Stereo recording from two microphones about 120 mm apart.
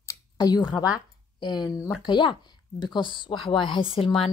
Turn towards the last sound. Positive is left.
turn(degrees=45)  # may be behind; listen again after turning